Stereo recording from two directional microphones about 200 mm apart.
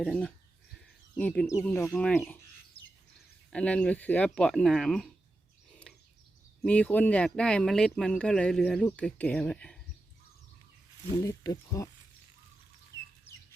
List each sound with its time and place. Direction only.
0.0 s speech: 5° left (ahead or behind)
3.5 s speech: 5° left (ahead or behind)
5.9 s a sound: 5° left (ahead or behind)
6.6 s speech: 5° left (ahead or behind)
11.2 s speech: 15° left (ahead or behind)
12.9 s chicken: 15° left (ahead or behind)